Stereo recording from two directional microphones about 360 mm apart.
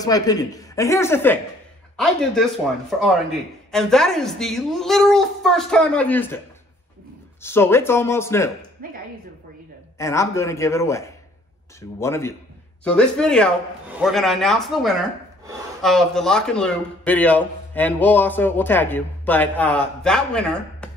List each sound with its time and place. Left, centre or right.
0.0 s speech: centre
7.4 s speech: centre
8.8 s speech: right
9.9 s speech: centre